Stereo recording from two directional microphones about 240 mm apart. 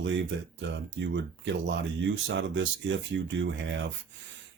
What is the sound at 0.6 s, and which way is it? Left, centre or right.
Speech, right.